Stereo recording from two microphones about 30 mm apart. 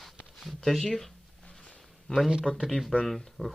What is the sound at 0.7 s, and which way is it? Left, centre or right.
Speech, centre.